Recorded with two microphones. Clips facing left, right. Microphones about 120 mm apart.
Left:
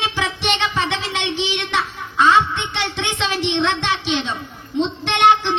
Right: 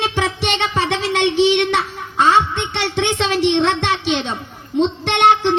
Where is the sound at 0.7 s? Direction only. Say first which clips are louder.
Right 4 dB; 55° right (ahead or behind).